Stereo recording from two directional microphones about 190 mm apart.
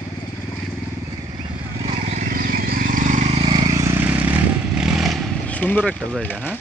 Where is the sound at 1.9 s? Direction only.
40° right (ahead or behind).